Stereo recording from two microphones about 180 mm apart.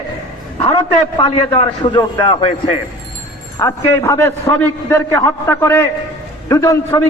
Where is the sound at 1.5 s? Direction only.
25° left (ahead or behind).